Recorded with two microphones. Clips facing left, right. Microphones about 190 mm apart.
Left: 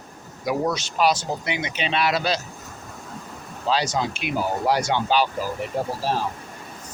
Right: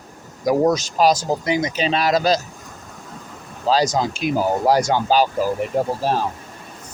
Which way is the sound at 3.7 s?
40° right (ahead or behind).